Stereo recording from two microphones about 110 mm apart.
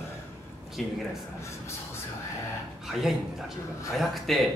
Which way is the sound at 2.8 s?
Centre (ahead or behind).